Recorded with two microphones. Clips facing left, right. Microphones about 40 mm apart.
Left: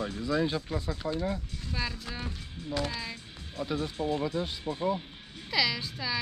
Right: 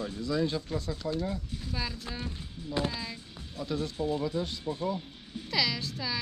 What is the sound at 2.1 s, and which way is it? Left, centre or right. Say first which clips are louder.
Speech: even; centre.